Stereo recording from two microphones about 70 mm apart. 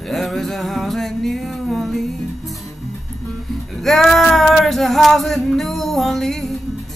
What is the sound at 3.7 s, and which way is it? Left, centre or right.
Male singing, centre.